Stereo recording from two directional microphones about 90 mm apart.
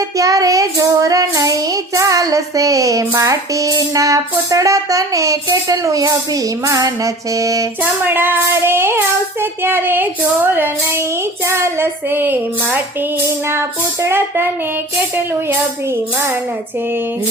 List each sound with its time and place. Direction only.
0.2 s child singing: 40° right (ahead or behind)
3.1 s music: 35° right (ahead or behind)
7.8 s music: 20° right (ahead or behind)